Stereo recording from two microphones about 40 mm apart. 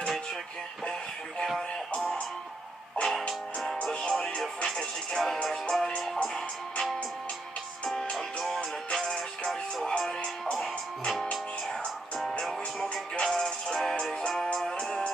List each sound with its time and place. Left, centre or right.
3.1 s music: centre
3.8 s music: centre
4.6 s music: centre